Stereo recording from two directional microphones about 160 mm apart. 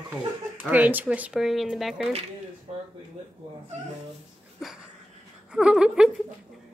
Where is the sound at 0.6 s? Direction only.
10° right (ahead or behind).